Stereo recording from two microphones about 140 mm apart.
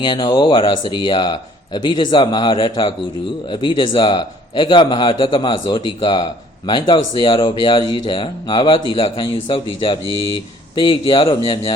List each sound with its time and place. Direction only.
0.0 s speech: 35° left (ahead or behind)